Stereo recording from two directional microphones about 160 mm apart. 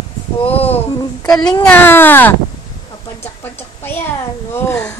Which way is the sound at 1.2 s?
25° left (ahead or behind).